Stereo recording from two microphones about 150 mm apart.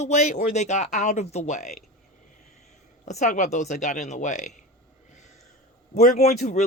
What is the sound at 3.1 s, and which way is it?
A woman's voice, 55° left (ahead or behind).